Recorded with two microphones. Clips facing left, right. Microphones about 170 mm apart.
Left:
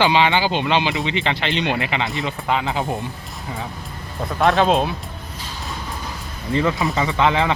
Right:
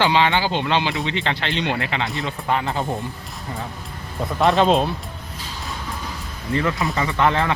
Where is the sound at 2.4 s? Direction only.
15° left (ahead or behind).